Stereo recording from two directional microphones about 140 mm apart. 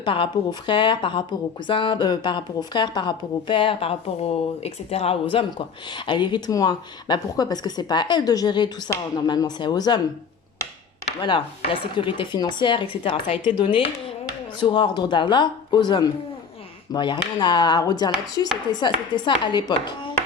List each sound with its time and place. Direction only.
0.0 s speech: 40° left (ahead or behind)
11.2 s speech: 35° left (ahead or behind)
14.6 s speech: 35° left (ahead or behind)